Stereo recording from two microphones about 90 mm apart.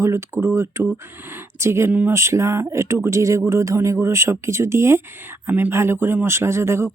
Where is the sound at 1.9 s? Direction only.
20° right (ahead or behind).